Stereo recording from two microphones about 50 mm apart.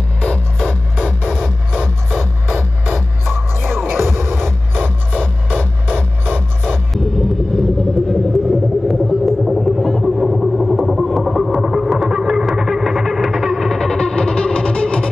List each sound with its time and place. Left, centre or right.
0.2 s music: centre
3.3 s music: right
4.4 s music: centre
6.9 s rumble: centre
8.1 s vehicle: centre
11.9 s a sound: centre
13.3 s music: centre